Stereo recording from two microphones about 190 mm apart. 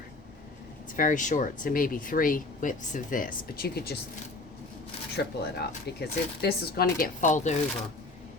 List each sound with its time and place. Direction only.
0.9 s speech: 45° left (ahead or behind)
5.1 s speech: 55° left (ahead or behind); by 7.5 s 40° left (ahead or behind)